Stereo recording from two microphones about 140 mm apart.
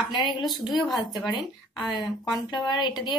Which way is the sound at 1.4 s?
Centre (ahead or behind).